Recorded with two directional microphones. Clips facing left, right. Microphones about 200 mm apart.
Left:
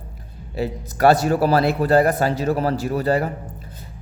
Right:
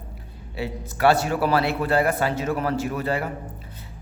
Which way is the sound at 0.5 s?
40° left (ahead or behind).